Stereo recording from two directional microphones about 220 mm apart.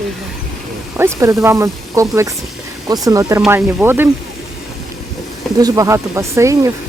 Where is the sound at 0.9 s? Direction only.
10° right (ahead or behind).